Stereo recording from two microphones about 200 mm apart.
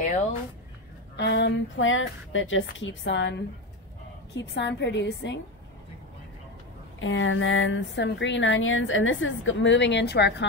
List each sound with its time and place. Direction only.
1.1 s a woman's voice: 60° left (ahead or behind)
7.0 s speech: 75° left (ahead or behind)